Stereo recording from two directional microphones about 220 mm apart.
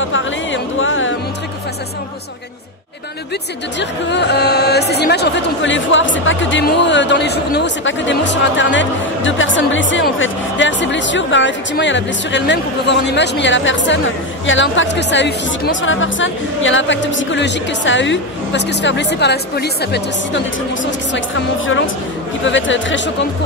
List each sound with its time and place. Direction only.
0.0 s music: 60° left (ahead or behind)
4.1 s speech: 50° left (ahead or behind)
22.4 s speech: 55° left (ahead or behind)